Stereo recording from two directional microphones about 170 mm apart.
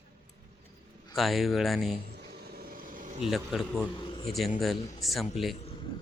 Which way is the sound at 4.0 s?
30° left (ahead or behind).